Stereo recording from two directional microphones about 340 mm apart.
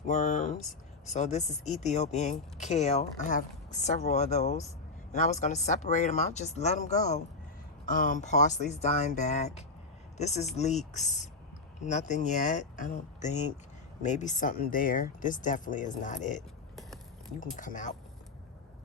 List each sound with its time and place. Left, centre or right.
0.1 s a woman's voice: left
17.4 s a woman's voice: left